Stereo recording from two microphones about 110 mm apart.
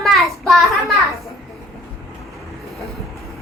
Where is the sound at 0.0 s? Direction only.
Centre (ahead or behind).